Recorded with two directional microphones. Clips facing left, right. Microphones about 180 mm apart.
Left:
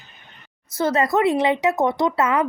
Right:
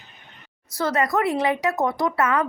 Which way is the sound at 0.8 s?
25° left (ahead or behind).